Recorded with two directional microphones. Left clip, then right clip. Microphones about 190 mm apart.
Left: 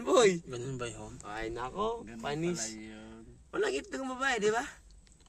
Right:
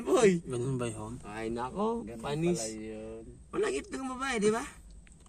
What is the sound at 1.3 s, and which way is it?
Speech, 25° left (ahead or behind).